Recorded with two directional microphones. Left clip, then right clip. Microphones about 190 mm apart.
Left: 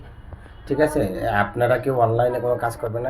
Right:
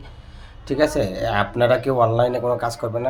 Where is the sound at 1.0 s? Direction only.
20° right (ahead or behind).